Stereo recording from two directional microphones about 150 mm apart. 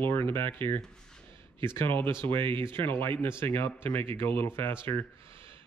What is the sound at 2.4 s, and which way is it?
Speech, 35° right (ahead or behind).